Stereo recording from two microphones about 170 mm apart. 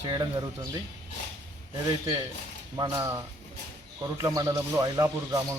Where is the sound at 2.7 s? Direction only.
20° right (ahead or behind).